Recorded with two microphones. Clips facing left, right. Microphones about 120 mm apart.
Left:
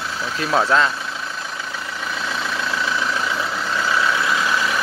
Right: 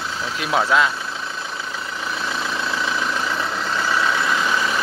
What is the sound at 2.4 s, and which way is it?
Vehicle, 5° right (ahead or behind).